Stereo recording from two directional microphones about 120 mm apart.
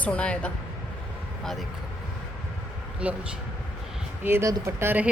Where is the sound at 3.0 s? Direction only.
10° right (ahead or behind).